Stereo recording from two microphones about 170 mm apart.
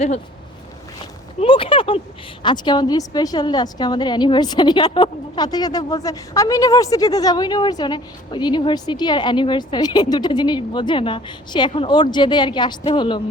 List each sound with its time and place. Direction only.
1.4 s a woman's voice: 30° left (ahead or behind)